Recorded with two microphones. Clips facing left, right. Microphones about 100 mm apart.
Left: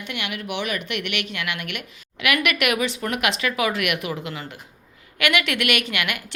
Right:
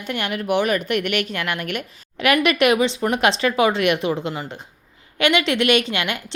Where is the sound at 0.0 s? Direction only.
40° right (ahead or behind).